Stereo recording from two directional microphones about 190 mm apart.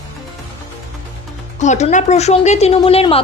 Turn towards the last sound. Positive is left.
turn(degrees=30)  # may be behind; listen again after turning